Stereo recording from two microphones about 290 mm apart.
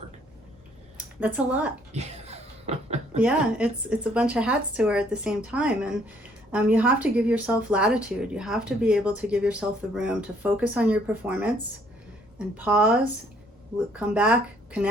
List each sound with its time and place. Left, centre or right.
0.9 s speech: centre
1.9 s a sound: right
3.2 s speech: centre
12.5 s speech: centre
13.9 s speech: centre